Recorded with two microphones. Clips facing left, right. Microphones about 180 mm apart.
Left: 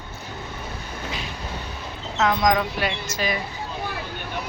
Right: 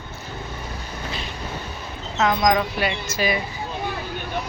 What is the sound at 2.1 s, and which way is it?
Speech, centre (ahead or behind).